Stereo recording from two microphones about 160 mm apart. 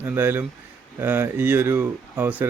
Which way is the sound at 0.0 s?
15° right (ahead or behind).